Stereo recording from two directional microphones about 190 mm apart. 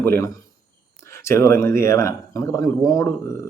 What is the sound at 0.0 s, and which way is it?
Speech, 10° left (ahead or behind).